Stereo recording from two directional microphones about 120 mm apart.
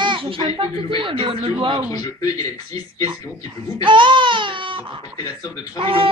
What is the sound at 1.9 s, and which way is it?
Speech, 30° left (ahead or behind).